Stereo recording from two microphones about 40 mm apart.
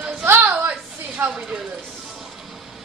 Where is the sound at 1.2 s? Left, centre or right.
Right.